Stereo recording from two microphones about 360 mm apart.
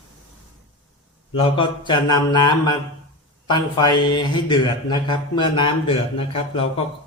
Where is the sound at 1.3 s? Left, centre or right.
Centre.